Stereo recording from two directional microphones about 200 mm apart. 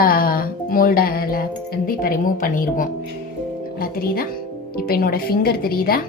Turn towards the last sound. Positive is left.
turn(degrees=50)  # may be behind; listen again after turning